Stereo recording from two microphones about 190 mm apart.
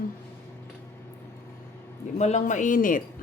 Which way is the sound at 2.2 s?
35° left (ahead or behind).